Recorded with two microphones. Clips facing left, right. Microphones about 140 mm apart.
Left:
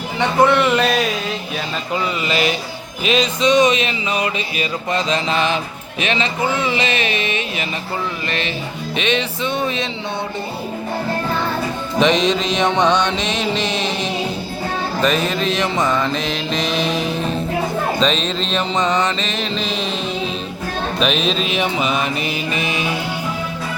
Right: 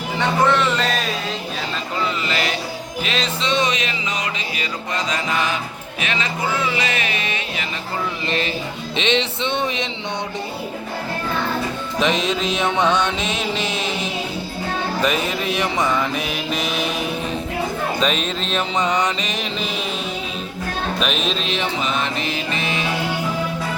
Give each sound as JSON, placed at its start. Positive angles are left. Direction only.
{"t": 0.2, "sound": "music", "side_deg": 10}
{"t": 2.2, "sound": "music", "side_deg": 20}
{"t": 6.7, "sound": "music", "side_deg": 25}
{"t": 9.0, "sound": "music", "side_deg": -25}
{"t": 11.9, "sound": "music", "side_deg": -5}
{"t": 18.0, "sound": "music", "side_deg": -10}
{"t": 21.0, "sound": "music", "side_deg": 0}